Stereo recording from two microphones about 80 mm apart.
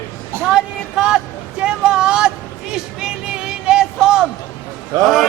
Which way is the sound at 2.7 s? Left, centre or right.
Centre.